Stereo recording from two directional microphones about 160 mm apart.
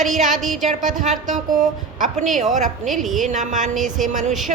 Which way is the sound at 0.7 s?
55° right (ahead or behind).